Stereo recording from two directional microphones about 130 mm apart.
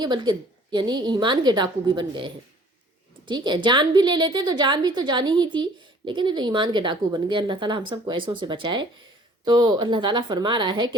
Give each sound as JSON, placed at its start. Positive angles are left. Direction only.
{"t": 0.0, "sound": "a woman's voice", "side_deg": -35}